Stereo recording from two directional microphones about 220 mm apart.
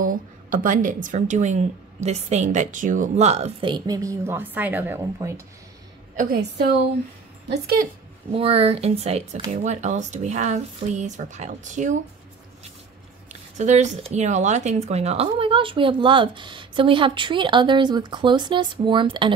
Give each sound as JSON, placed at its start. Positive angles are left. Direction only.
{"t": 0.0, "sound": "a woman's voice", "side_deg": -35}
{"t": 6.1, "sound": "a woman's voice", "side_deg": -40}
{"t": 8.4, "sound": "a woman's voice", "side_deg": -25}
{"t": 13.3, "sound": "speech", "side_deg": -30}